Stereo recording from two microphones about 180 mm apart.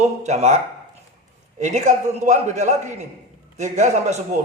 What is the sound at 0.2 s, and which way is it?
Speech, 40° right (ahead or behind).